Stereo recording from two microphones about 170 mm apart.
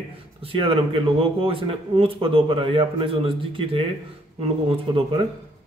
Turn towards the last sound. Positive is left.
turn(degrees=-35)  # may be behind; listen again after turning